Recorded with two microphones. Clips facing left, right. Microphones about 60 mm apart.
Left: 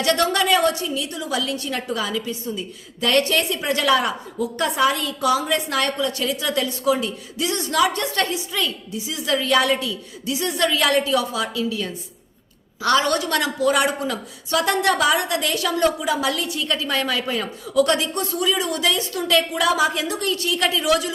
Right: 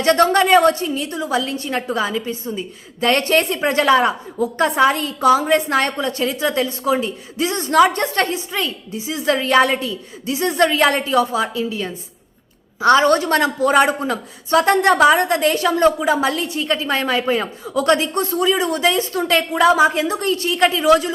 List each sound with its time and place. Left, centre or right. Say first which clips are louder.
0.0 s a woman's voice: right 5 dB; right